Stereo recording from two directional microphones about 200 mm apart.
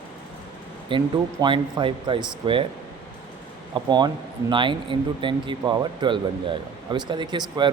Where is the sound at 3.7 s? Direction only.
20° right (ahead or behind).